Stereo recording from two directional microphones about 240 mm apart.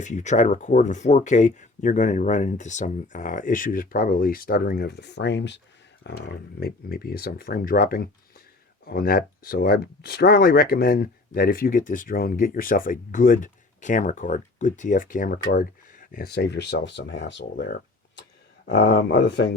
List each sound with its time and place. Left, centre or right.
0.0 s speech: left